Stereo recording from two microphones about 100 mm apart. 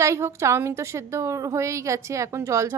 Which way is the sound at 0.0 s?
30° right (ahead or behind).